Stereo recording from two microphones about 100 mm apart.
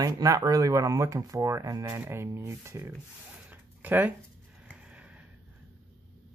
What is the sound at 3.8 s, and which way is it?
Speech, 15° right (ahead or behind).